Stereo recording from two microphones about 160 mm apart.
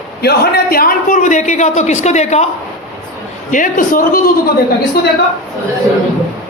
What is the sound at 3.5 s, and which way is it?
Speech, 60° left (ahead or behind).